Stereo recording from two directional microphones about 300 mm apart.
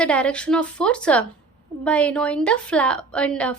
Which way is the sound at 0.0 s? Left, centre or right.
Centre.